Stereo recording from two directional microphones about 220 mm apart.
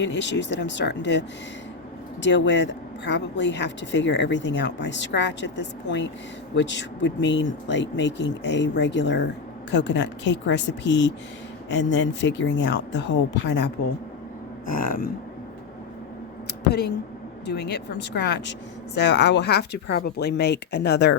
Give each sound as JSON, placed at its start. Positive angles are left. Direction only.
{"t": 0.0, "sound": "speech", "side_deg": 55}
{"t": 2.2, "sound": "speech", "side_deg": 55}
{"t": 14.7, "sound": "speech", "side_deg": 40}
{"t": 16.6, "sound": "speech", "side_deg": 50}